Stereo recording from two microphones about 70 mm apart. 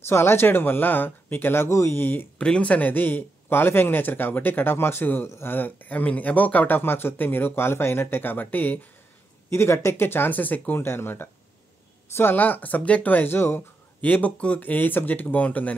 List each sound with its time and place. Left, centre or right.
0.0 s speech: left
2.0 s speech: left
2.3 s speech: centre
9.5 s speech: left